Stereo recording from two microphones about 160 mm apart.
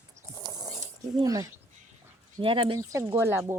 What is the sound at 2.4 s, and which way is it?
Speech, 35° right (ahead or behind).